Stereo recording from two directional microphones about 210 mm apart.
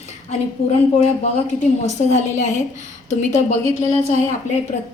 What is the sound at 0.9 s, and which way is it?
A woman's voice, 30° left (ahead or behind).